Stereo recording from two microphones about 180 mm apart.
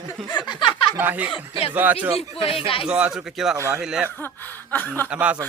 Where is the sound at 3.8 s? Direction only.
5° right (ahead or behind).